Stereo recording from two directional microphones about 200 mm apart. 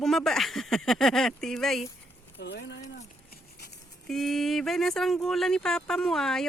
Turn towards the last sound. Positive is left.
turn(degrees=0)  # may be behind; listen again after turning